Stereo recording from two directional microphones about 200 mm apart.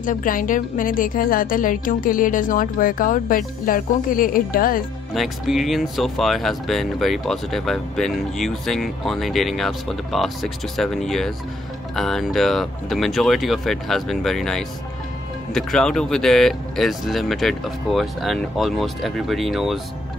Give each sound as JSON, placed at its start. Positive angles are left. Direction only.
{"t": 0.0, "sound": "a woman's voice", "side_deg": 40}
{"t": 5.1, "sound": "speech", "side_deg": 0}